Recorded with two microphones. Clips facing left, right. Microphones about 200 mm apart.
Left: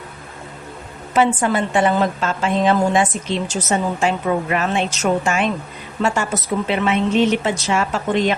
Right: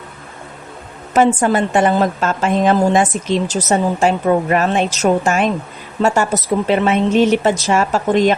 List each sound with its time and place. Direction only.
1.1 s a woman's voice: 45° right (ahead or behind)